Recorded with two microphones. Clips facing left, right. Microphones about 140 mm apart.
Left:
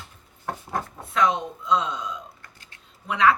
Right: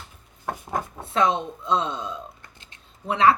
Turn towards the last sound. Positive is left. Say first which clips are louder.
# right 2 dB
turn(degrees=-30)  # may be behind; listen again after turning